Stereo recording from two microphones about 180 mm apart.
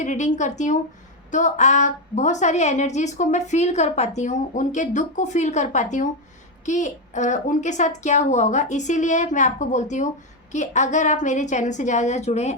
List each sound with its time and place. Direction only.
0.0 s a woman's voice: 45° left (ahead or behind)